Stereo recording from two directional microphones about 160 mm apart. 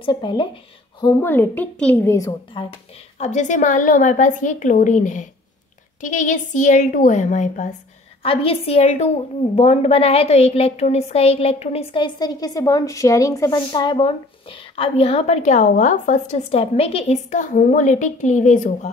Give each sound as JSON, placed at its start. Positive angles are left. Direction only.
{"t": 0.0, "sound": "speech", "side_deg": 30}
{"t": 1.0, "sound": "a woman's voice", "side_deg": 15}
{"t": 2.1, "sound": "speech", "side_deg": 25}
{"t": 3.2, "sound": "a woman's voice", "side_deg": 45}
{"t": 8.2, "sound": "a woman's voice", "side_deg": 35}